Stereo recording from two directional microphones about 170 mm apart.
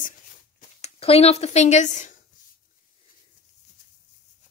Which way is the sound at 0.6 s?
35° left (ahead or behind).